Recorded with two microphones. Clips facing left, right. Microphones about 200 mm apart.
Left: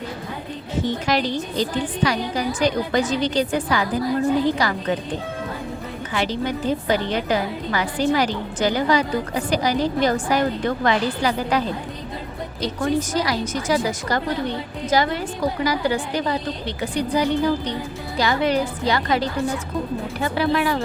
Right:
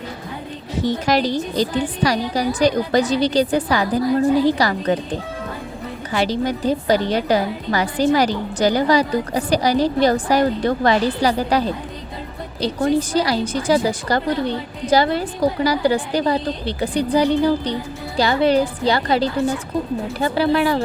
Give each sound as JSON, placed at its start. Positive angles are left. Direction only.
{"t": 0.9, "sound": "a woman's voice", "side_deg": -40}
{"t": 6.1, "sound": "a woman's voice", "side_deg": -35}